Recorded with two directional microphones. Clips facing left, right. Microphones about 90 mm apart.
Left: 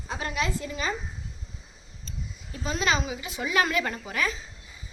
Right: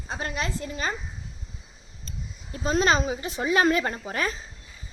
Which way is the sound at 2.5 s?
40° right (ahead or behind).